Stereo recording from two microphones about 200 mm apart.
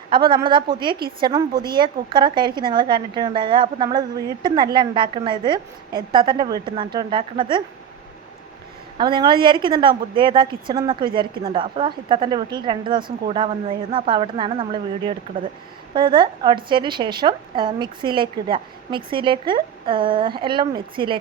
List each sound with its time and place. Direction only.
0.1 s a woman's voice: 25° right (ahead or behind)
9.0 s a woman's voice: 25° right (ahead or behind)